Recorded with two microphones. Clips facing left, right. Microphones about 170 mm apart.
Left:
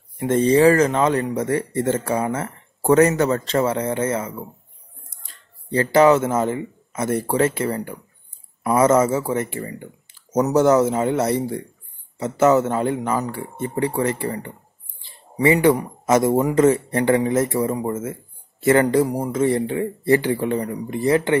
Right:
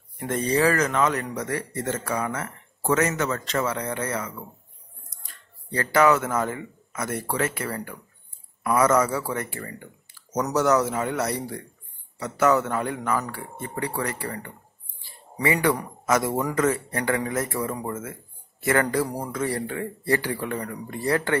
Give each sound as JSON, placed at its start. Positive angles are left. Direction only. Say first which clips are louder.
{"t": 0.2, "sound": "speech", "louder": "left 8 dB", "side_deg": 25}